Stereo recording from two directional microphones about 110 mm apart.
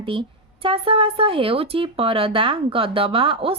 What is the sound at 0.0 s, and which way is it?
A woman's voice, 50° right (ahead or behind).